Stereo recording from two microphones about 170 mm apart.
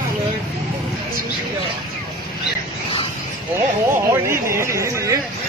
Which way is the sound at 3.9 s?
15° right (ahead or behind).